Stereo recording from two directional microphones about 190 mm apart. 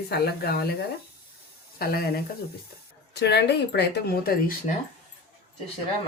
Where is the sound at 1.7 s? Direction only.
50° left (ahead or behind).